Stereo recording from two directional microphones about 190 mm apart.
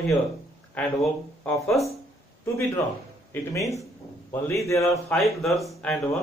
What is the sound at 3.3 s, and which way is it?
A man's voice, 15° left (ahead or behind).